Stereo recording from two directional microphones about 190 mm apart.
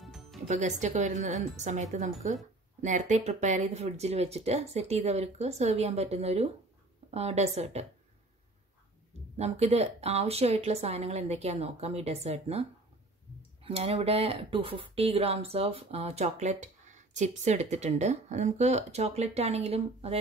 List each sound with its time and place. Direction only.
0.0 s music: centre (ahead or behind)
0.5 s speech: 40° right (ahead or behind)
9.4 s speech: 35° right (ahead or behind)
13.7 s speech: 30° right (ahead or behind)